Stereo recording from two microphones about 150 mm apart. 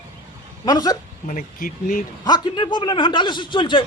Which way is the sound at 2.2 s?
30° left (ahead or behind).